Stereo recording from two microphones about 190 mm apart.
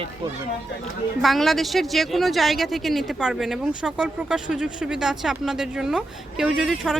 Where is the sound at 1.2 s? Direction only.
Centre (ahead or behind).